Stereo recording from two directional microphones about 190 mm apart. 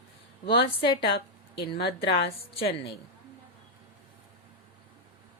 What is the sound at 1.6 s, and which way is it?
A woman's voice, 60° left (ahead or behind).